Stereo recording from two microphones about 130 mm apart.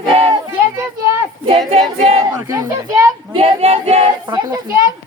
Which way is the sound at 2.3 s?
30° right (ahead or behind).